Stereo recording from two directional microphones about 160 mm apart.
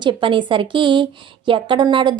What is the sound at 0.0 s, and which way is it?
A woman's voice, 30° right (ahead or behind).